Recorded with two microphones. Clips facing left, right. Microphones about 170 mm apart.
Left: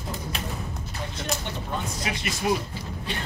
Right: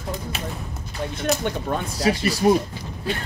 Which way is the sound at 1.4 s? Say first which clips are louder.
Right 7 dB; 55° right (ahead or behind).